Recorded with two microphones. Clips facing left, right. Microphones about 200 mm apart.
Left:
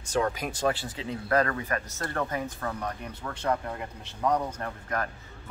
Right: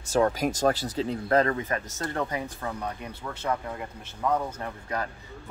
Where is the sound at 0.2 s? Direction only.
40° right (ahead or behind).